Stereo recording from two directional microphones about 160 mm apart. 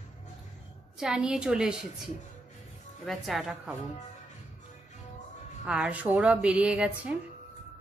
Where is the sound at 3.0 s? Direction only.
Centre (ahead or behind).